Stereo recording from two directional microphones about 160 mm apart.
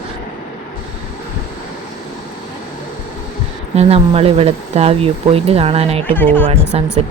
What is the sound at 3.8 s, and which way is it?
A woman's voice, 40° right (ahead or behind).